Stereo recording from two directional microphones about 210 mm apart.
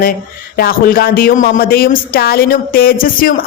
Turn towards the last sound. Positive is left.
turn(degrees=40)  # may be behind; listen again after turning